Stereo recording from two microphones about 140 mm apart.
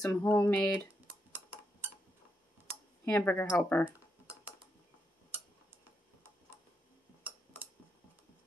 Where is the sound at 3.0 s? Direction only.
15° left (ahead or behind).